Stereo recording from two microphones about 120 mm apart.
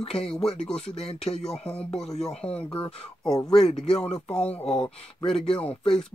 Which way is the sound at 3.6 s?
65° left (ahead or behind).